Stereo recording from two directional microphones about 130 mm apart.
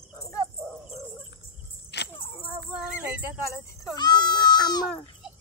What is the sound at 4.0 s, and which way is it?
Speech, 35° left (ahead or behind).